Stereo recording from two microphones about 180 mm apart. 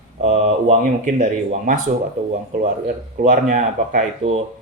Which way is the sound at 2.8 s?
45° right (ahead or behind).